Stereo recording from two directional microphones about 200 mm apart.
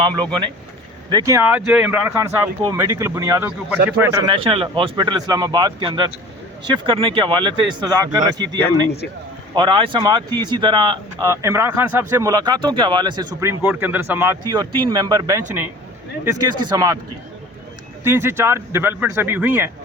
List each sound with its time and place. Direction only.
1.1 s speech: 15° right (ahead or behind)
4.3 s speech: 25° right (ahead or behind)
9.6 s speech: 25° right (ahead or behind)
18.0 s speech: 10° right (ahead or behind)